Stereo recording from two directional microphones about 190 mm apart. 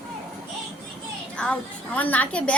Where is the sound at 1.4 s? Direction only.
5° left (ahead or behind).